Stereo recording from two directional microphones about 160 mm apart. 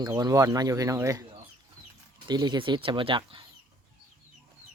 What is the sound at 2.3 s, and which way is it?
Speech, 25° right (ahead or behind).